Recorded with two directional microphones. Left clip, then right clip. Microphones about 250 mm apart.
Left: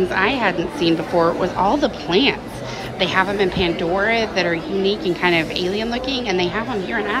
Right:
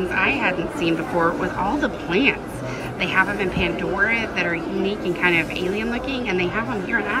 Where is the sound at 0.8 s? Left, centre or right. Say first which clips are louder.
Left 4 dB; centre.